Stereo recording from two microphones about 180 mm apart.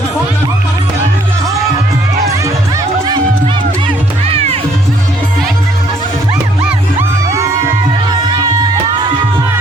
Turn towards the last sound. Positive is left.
turn(degrees=-15)  # may be behind; listen again after turning